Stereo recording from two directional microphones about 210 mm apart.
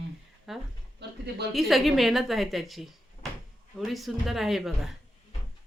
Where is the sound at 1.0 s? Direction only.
50° right (ahead or behind).